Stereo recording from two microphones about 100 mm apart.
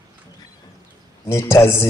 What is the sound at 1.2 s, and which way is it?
Speech, 25° left (ahead or behind).